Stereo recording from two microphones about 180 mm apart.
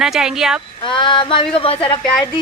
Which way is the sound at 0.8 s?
25° left (ahead or behind).